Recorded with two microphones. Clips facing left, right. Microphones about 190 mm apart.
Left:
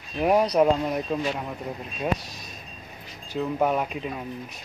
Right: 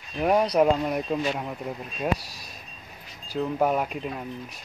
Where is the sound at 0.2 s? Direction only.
Centre (ahead or behind).